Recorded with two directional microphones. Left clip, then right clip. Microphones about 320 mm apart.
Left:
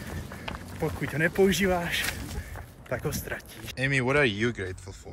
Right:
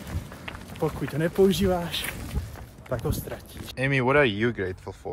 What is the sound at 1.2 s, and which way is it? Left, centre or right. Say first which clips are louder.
Speech: right 1 dB; centre.